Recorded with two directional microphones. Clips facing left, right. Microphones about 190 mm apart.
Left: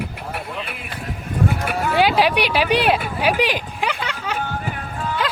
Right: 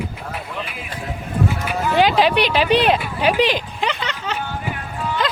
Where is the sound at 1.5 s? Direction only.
55° left (ahead or behind).